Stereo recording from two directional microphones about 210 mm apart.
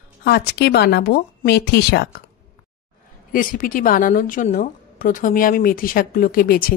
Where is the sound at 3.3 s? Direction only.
40° left (ahead or behind).